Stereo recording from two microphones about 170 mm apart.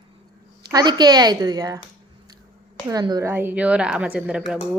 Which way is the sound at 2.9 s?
20° right (ahead or behind).